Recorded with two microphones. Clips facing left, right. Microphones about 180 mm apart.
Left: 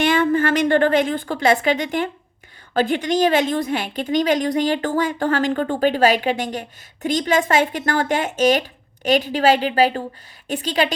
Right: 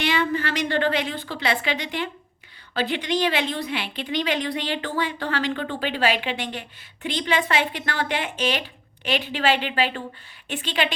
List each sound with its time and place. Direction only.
0.0 s a woman's voice: 50° left (ahead or behind)